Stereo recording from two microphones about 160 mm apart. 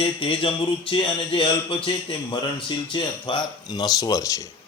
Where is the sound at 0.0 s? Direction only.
35° left (ahead or behind).